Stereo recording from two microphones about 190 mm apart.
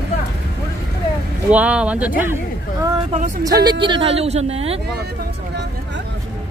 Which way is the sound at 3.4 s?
20° right (ahead or behind).